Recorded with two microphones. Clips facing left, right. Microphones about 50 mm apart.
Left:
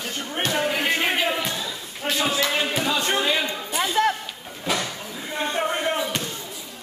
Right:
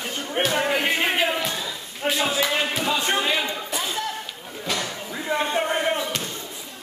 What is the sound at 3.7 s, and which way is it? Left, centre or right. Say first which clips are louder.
Music: left 9 dB; left.